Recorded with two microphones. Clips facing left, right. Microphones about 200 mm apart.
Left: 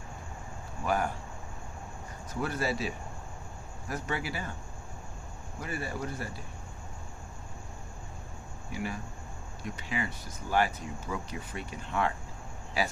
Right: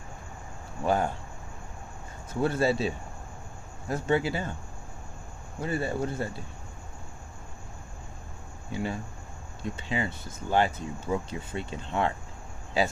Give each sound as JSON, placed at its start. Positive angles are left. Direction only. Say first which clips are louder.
{"t": 0.8, "sound": "speech", "louder": "right 4 dB", "side_deg": -25}
{"t": 2.4, "sound": "speech", "louder": "right 7 dB", "side_deg": -25}
{"t": 3.9, "sound": "speech", "louder": "right 8 dB", "side_deg": -25}
{"t": 5.6, "sound": "speech", "louder": "right 7 dB", "side_deg": -25}
{"t": 8.7, "sound": "speech", "louder": "right 4 dB", "side_deg": -25}